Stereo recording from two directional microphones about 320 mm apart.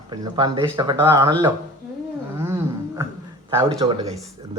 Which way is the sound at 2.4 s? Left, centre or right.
Centre.